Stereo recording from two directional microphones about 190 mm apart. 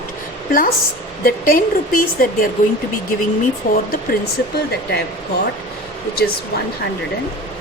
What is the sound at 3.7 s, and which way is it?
Speech, 55° left (ahead or behind).